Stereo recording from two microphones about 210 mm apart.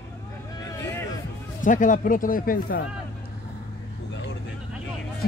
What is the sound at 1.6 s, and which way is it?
A man's voice, 40° left (ahead or behind).